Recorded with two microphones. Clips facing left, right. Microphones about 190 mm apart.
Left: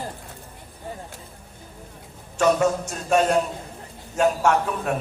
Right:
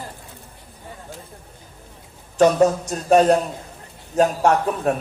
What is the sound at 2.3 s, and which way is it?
A man's voice, 35° right (ahead or behind).